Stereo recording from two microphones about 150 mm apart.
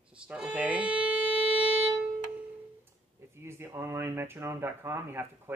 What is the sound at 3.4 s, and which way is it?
Speech, 15° right (ahead or behind).